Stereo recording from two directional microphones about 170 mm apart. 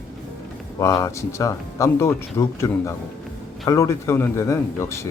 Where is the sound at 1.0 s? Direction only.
15° left (ahead or behind).